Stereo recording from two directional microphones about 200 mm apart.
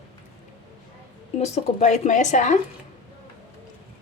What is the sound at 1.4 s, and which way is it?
Speech, 35° left (ahead or behind).